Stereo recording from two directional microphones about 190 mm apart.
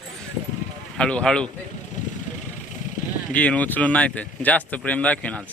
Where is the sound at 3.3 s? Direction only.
5° left (ahead or behind).